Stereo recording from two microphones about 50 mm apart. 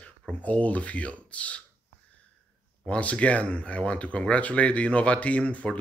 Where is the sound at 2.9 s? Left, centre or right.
Left.